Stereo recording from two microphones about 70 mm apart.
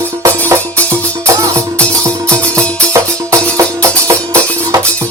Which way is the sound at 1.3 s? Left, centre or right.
Right.